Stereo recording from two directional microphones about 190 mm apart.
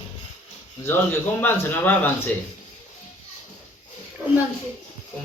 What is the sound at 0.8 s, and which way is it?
Speech, 10° left (ahead or behind).